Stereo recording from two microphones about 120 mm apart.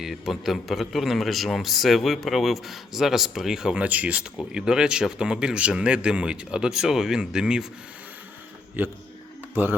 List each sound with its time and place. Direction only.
0.0 s a man's voice: centre (ahead or behind)
8.8 s speech: 15° right (ahead or behind)